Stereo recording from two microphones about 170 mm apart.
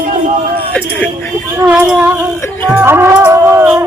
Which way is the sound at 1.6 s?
10° right (ahead or behind).